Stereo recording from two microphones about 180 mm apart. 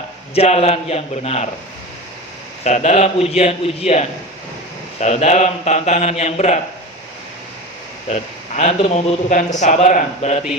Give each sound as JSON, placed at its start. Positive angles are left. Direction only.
{"t": 0.3, "sound": "a man's voice", "side_deg": 35}
{"t": 2.6, "sound": "a man's voice", "side_deg": 40}
{"t": 8.1, "sound": "a man's voice", "side_deg": 40}